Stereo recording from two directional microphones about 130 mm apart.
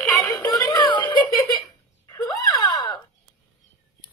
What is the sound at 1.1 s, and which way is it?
Giggle, 35° left (ahead or behind).